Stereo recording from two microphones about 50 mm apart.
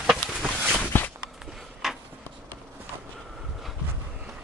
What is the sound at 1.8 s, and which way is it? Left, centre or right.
Writing, centre.